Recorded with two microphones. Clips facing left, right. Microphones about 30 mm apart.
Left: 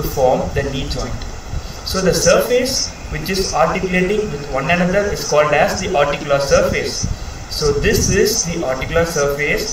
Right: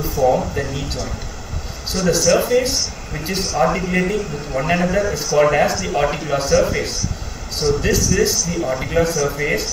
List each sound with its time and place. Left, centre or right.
0.2 s speech: centre
2.0 s a man's voice: centre
2.3 s a man's voice: centre